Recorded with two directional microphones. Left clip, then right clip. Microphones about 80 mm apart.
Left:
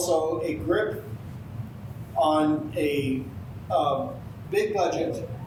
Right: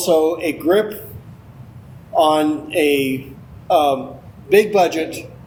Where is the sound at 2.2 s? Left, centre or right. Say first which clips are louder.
Right 7 dB; right.